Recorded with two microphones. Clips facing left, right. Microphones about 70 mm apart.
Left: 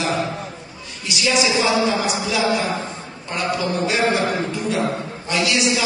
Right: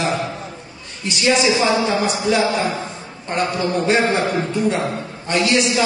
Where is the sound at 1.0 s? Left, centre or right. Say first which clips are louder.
Right 3 dB; right.